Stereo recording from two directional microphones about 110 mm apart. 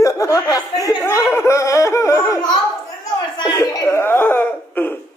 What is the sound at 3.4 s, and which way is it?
Chuckle, 35° left (ahead or behind).